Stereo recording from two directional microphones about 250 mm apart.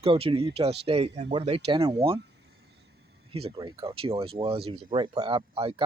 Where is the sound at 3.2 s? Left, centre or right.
Right.